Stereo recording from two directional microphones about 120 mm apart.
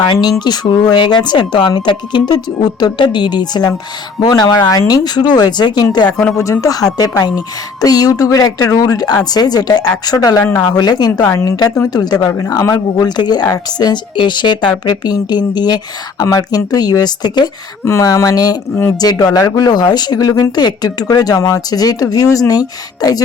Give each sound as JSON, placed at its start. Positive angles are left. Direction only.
{"t": 0.0, "sound": "speech", "side_deg": 35}
{"t": 6.1, "sound": "speech", "side_deg": 10}
{"t": 6.4, "sound": "speech", "side_deg": 25}
{"t": 11.3, "sound": "speech", "side_deg": 25}